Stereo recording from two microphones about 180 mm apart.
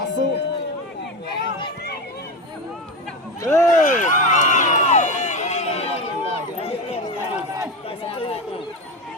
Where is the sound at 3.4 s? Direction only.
15° left (ahead or behind).